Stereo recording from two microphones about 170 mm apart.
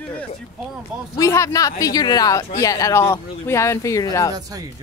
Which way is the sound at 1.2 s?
20° left (ahead or behind).